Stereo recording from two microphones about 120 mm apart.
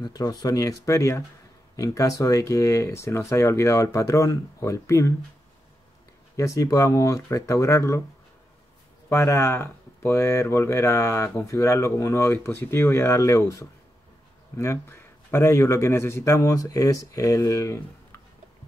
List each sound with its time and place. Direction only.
0.0 s speech: 35° left (ahead or behind)
6.3 s speech: 30° left (ahead or behind)
9.1 s speech: 20° left (ahead or behind)